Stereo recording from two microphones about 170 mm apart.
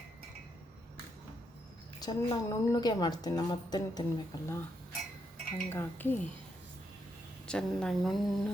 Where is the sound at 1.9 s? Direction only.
25° left (ahead or behind).